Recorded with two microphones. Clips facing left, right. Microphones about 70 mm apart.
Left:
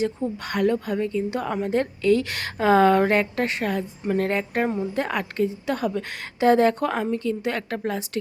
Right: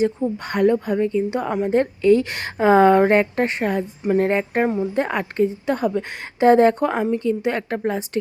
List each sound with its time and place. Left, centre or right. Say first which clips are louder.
0.0 s a woman's voice: right 5 dB; right